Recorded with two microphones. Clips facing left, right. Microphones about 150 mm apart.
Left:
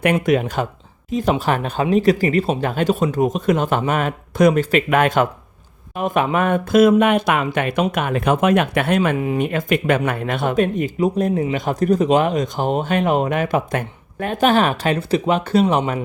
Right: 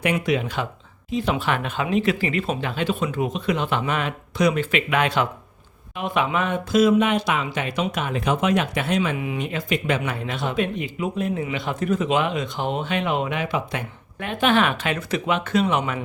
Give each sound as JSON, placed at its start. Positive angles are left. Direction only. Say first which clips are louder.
{"t": 0.0, "sound": "speech", "louder": "left 5 dB", "side_deg": 50}